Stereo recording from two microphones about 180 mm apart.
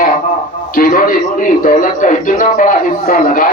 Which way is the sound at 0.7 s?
50° left (ahead or behind).